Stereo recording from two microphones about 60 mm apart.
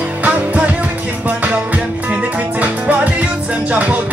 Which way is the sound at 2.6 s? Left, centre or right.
Right.